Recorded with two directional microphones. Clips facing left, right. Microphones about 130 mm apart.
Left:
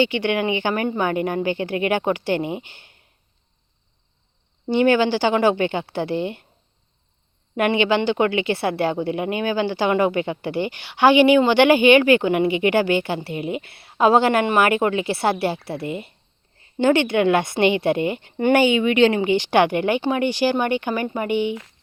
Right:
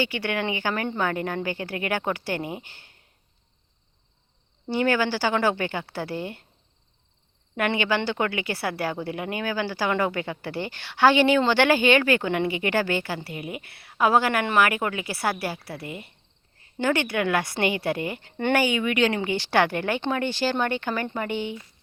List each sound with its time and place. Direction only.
0.0 s a woman's voice: 20° left (ahead or behind)
4.6 s a woman's voice: 20° left (ahead or behind)
7.5 s a woman's voice: 20° left (ahead or behind)